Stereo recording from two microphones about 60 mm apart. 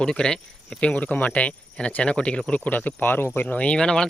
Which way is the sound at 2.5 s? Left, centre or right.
Left.